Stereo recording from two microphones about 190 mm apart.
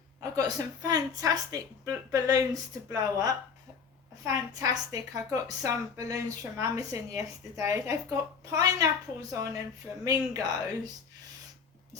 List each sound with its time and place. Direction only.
0.2 s a woman's voice: 20° right (ahead or behind)